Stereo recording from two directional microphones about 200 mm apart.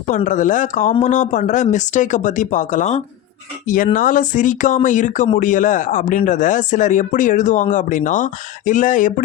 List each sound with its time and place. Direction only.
0.1 s speech: 40° left (ahead or behind)